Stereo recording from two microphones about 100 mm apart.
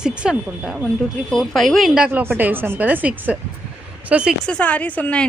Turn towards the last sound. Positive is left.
turn(degrees=15)  # may be behind; listen again after turning